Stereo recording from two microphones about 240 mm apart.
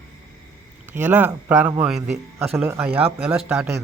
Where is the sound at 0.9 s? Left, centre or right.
Centre.